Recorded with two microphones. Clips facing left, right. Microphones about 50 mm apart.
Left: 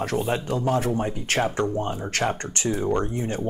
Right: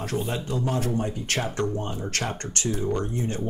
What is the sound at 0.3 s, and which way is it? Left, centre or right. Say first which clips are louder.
Speech: left 4 dB; left.